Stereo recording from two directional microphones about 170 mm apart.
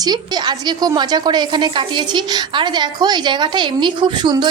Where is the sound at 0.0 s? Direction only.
25° right (ahead or behind).